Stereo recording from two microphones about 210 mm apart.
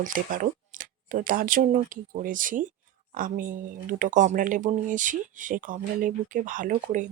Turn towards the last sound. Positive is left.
turn(degrees=-40)  # may be behind; listen again after turning